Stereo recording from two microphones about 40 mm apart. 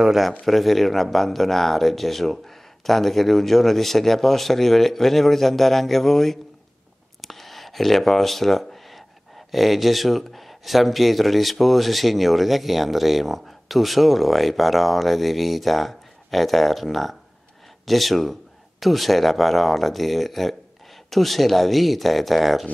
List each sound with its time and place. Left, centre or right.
0.5 s speech: centre
7.2 s a sound: centre
9.5 s speech: centre